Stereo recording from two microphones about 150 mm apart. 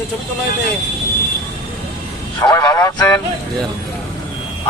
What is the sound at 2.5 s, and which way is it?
Speech, 25° left (ahead or behind).